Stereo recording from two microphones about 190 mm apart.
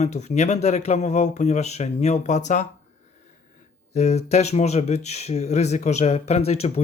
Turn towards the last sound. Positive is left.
turn(degrees=35)  # may be behind; listen again after turning